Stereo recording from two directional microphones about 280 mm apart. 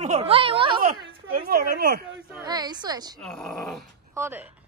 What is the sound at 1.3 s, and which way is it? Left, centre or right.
Speech, right.